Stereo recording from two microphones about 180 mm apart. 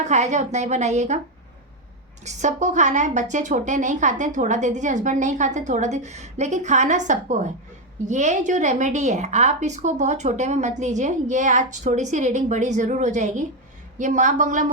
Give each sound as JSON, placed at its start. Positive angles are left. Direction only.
{"t": 0.0, "sound": "a woman's voice", "side_deg": -40}
{"t": 2.2, "sound": "a woman's voice", "side_deg": -40}